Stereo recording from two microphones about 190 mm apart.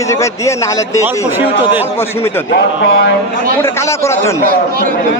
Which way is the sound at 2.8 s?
75° left (ahead or behind).